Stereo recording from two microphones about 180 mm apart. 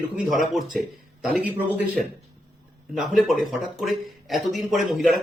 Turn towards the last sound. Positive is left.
turn(degrees=0)  # may be behind; listen again after turning